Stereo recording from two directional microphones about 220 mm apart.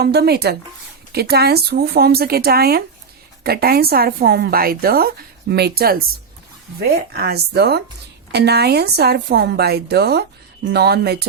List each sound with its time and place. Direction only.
0.0 s a woman's voice: 45° right (ahead or behind)